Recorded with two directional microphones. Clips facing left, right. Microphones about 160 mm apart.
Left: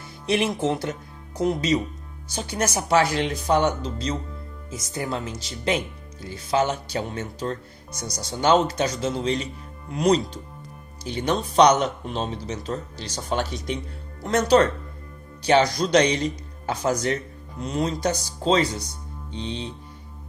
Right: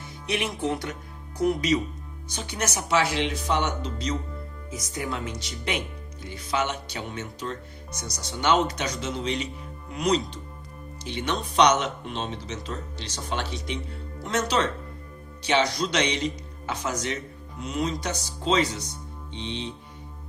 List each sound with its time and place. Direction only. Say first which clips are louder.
0.3 s speech: left 5 dB; 30° left (ahead or behind)
15.4 s speech: left 5 dB; 40° left (ahead or behind)